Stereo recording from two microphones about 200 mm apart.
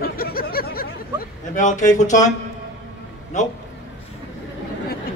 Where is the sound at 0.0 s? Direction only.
50° left (ahead or behind).